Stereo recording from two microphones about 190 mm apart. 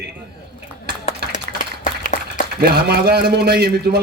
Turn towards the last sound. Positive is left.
turn(degrees=-55)  # may be behind; listen again after turning